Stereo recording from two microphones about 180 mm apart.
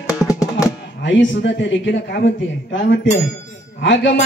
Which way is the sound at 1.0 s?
75° left (ahead or behind).